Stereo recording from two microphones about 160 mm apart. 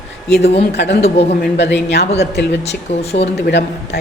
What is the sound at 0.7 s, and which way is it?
Speech, 90° left.